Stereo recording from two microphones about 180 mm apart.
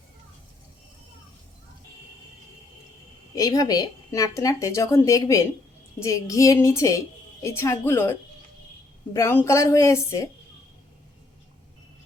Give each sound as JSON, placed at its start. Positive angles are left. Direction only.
{"t": 3.3, "sound": "a woman's voice", "side_deg": 20}